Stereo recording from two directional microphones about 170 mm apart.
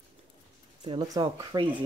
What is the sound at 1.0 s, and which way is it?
Speech, 20° right (ahead or behind).